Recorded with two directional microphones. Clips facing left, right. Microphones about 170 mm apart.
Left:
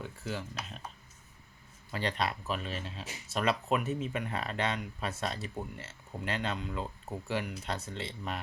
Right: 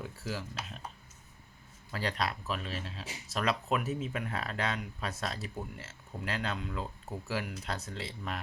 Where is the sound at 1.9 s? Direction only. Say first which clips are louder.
Left 1 dB; centre (ahead or behind).